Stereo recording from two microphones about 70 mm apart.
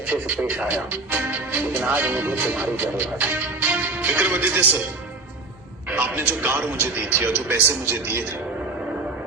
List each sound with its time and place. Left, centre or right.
0.1 s speech: right
5.9 s a man's voice: right